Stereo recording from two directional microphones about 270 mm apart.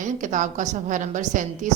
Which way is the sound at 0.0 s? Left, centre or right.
Right.